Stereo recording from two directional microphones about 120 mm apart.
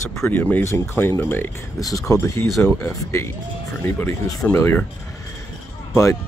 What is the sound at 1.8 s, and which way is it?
Speech, 30° left (ahead or behind).